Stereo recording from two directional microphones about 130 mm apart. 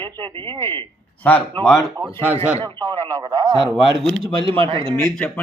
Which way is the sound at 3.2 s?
35° right (ahead or behind).